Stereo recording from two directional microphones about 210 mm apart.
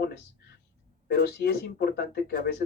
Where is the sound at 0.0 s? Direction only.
50° left (ahead or behind).